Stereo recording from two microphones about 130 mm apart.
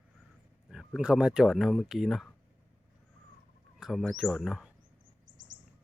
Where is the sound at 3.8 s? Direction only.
Centre (ahead or behind).